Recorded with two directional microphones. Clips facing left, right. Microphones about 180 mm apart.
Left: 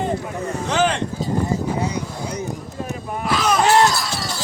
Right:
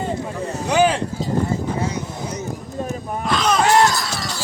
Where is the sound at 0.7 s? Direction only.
10° right (ahead or behind).